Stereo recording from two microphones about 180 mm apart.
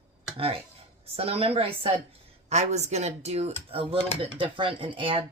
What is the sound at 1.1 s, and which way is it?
A woman's voice, 30° right (ahead or behind).